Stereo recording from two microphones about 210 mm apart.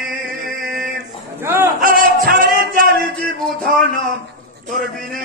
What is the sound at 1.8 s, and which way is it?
Music, 40° right (ahead or behind).